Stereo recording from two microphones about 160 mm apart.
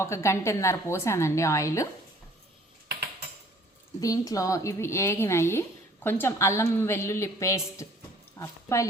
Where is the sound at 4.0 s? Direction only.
20° left (ahead or behind).